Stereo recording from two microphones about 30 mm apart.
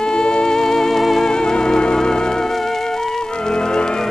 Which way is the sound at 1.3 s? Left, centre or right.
Left.